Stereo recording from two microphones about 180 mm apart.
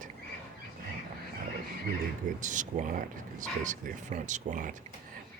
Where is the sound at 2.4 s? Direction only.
45° right (ahead or behind).